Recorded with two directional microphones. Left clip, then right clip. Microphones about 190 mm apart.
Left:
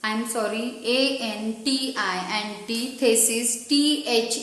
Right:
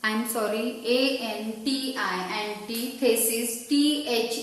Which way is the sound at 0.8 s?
40° left (ahead or behind).